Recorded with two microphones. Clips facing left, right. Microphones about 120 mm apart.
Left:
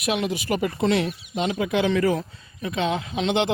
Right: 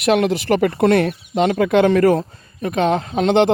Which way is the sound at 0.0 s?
70° right (ahead or behind).